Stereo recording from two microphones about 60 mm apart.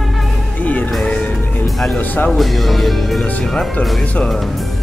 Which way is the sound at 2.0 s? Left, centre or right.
Left.